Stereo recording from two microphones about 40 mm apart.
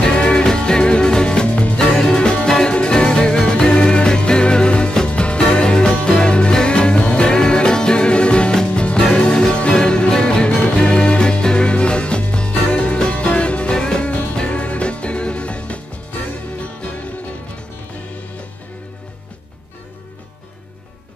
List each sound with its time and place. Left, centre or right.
0.0 s music: left
1.5 s music: left
1.8 s music: centre
13.7 s music: centre
14.0 s music: left
14.3 s music: left